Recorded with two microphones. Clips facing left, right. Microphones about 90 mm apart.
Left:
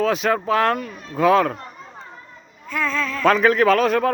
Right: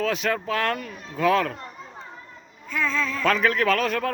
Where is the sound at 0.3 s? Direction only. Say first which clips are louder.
Left 6 dB; 25° left (ahead or behind).